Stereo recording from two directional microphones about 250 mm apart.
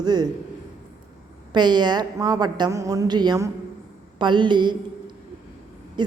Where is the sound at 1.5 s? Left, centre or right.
Centre.